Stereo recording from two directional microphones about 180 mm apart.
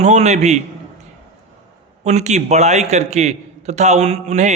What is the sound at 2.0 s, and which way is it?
A man's voice, 40° right (ahead or behind).